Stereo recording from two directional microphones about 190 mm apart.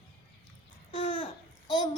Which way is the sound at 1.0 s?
30° left (ahead or behind).